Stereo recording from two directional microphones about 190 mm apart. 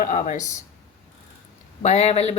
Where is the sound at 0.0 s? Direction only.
40° left (ahead or behind).